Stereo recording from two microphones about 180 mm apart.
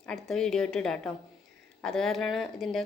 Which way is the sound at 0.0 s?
5° left (ahead or behind).